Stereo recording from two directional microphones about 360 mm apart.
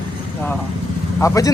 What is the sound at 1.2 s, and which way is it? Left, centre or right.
Speech, centre.